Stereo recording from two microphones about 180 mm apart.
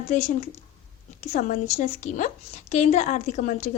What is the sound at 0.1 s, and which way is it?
A woman's voice, 45° left (ahead or behind).